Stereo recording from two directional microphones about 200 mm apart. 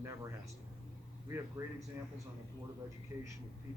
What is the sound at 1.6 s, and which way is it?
Speech, 15° right (ahead or behind).